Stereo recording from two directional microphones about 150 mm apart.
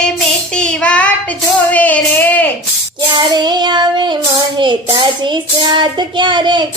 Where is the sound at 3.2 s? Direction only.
30° right (ahead or behind).